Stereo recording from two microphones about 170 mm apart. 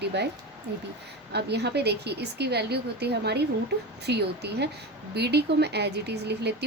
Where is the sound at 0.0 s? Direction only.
80° right.